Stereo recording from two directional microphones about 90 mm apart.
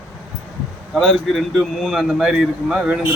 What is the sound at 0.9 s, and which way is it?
A man's voice, centre (ahead or behind).